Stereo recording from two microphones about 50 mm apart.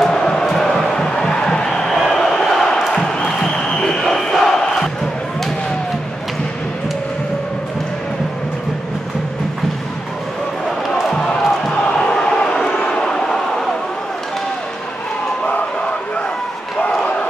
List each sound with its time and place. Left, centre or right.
0.0 s music: centre
0.5 s crowd: centre
2.0 s a sound: centre
3.0 s crowd: centre
11.1 s crowd: centre
12.8 s vehicle: centre
15.4 s crowd: left